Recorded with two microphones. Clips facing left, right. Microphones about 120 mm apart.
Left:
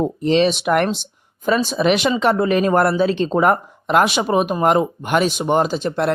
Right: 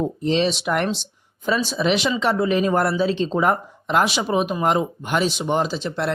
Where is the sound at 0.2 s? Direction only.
65° left (ahead or behind).